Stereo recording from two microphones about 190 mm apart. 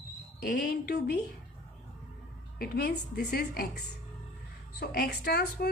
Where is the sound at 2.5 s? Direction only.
55° left (ahead or behind).